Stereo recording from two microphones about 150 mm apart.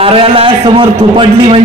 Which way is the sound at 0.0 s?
40° right (ahead or behind).